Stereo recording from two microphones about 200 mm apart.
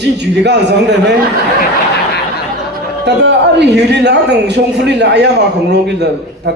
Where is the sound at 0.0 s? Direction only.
60° right (ahead or behind).